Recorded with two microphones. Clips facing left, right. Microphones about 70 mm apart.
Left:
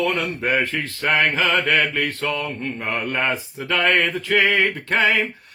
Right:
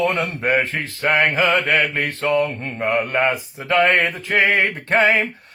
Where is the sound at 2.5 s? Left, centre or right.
Right.